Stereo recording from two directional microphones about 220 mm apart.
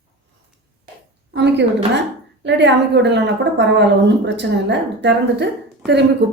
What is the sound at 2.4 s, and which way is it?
Speech, 55° right (ahead or behind).